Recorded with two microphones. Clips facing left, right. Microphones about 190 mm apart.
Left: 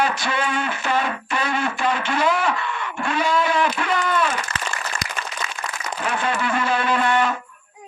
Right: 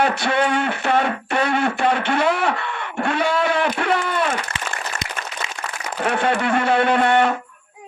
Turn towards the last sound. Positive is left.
turn(degrees=-60)  # may be behind; listen again after turning